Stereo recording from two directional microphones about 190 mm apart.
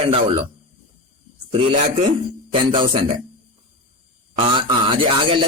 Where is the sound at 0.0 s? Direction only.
30° right (ahead or behind).